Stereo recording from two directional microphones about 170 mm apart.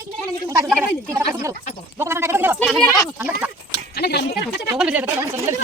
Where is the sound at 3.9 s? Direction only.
70° left (ahead or behind).